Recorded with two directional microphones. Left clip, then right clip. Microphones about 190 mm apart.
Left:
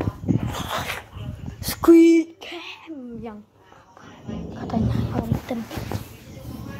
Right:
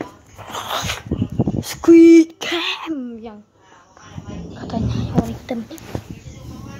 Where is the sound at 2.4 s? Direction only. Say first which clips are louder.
Right 13 dB; 40° right (ahead or behind).